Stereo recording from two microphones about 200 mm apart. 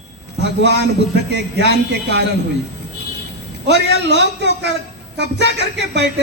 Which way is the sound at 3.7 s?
60° right (ahead or behind).